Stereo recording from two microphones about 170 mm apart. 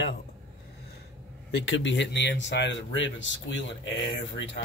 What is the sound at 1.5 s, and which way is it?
Speech, 90° left.